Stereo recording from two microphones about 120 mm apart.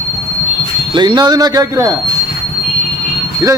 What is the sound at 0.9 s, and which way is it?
Speech, 40° right (ahead or behind).